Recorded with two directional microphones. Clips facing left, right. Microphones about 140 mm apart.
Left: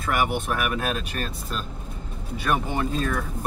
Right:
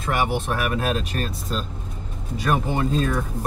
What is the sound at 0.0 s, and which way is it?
Speech, 30° right (ahead or behind).